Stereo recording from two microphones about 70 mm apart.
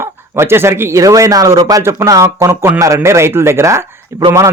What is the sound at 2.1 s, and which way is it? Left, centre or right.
Speech, right.